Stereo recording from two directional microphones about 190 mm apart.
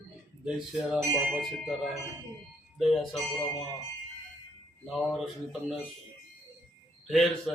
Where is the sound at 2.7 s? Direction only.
Centre (ahead or behind).